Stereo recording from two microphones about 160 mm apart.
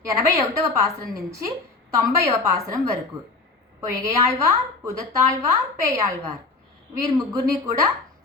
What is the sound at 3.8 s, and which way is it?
A woman's voice, 20° right (ahead or behind).